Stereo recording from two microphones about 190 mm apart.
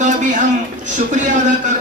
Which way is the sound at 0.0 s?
40° right (ahead or behind).